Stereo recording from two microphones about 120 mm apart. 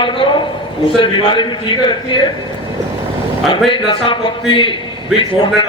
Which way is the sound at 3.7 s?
45° left (ahead or behind).